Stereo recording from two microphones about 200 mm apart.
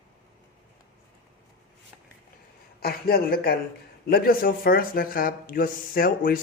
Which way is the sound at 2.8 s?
50° left (ahead or behind).